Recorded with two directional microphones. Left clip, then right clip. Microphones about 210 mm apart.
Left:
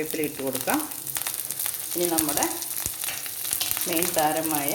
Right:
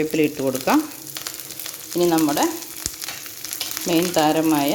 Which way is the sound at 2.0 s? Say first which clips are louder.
Right 8 dB; 50° right (ahead or behind).